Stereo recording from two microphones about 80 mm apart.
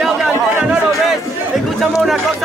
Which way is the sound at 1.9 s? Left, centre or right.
Centre.